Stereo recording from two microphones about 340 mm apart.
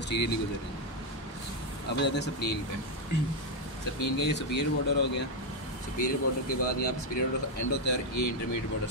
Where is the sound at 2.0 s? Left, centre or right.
Left.